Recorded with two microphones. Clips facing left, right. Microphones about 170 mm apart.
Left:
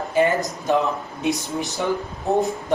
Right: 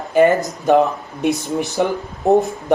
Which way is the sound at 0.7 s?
60° right (ahead or behind).